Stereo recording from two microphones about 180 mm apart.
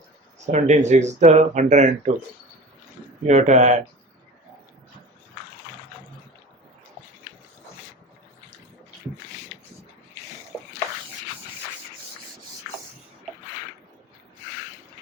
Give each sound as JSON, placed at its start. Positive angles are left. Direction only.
{"t": 0.3, "sound": "speech", "side_deg": -40}
{"t": 3.2, "sound": "speech", "side_deg": -40}